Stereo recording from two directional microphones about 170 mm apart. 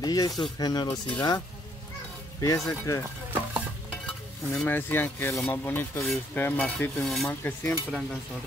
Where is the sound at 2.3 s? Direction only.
20° left (ahead or behind).